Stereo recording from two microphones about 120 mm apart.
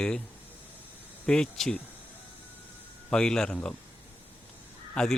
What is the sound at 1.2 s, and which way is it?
Speech, 5° left (ahead or behind).